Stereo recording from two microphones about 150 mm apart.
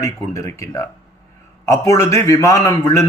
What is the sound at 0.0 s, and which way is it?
A man's voice, 20° left (ahead or behind).